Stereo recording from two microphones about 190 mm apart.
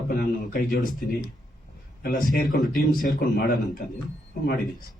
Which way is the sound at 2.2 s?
45° left (ahead or behind).